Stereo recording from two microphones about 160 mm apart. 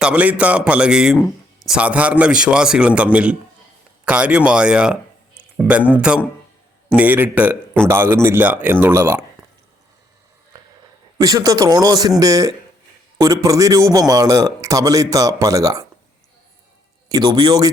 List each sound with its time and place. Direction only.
0.0 s a man's voice: 10° right (ahead or behind)
11.2 s a man's voice: 20° right (ahead or behind)
17.1 s a man's voice: 25° right (ahead or behind)